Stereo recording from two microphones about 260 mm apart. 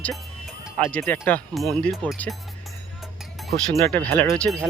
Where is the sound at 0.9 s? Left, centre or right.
Centre.